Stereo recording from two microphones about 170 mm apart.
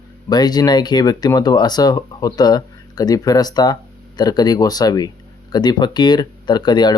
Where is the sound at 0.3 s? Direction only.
25° left (ahead or behind).